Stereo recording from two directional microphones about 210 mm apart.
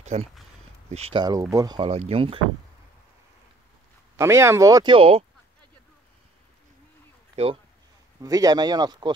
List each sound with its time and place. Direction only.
0.0 s speech: 30° right (ahead or behind)
4.2 s speech: 15° right (ahead or behind)
8.2 s speech: 15° right (ahead or behind)